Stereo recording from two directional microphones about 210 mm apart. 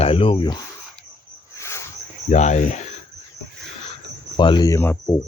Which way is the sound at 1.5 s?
15° left (ahead or behind).